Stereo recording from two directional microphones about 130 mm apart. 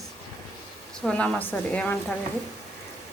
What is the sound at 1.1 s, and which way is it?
Speech, 10° left (ahead or behind).